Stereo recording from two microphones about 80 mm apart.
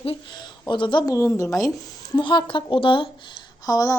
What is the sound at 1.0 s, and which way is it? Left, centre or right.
Speech, left.